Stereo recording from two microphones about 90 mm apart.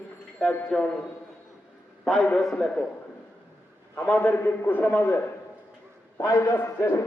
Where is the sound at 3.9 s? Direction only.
20° left (ahead or behind).